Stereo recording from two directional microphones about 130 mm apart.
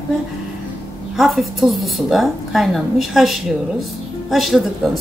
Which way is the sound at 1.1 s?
Centre (ahead or behind).